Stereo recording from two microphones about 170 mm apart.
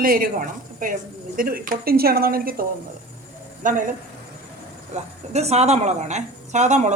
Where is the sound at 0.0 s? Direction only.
55° right (ahead or behind).